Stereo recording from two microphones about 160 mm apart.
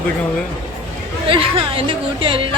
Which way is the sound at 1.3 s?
35° right (ahead or behind).